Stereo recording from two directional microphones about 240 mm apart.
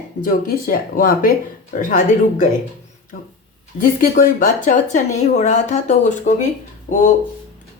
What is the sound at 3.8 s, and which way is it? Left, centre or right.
Speech, left.